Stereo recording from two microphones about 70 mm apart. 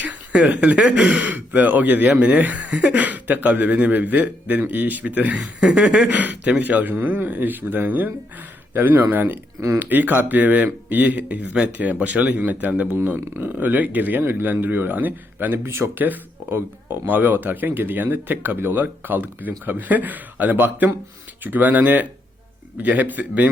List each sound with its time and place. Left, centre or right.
0.0 s speech: right
15.6 s speech: right